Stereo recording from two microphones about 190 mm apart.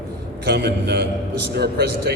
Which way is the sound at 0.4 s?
60° right (ahead or behind).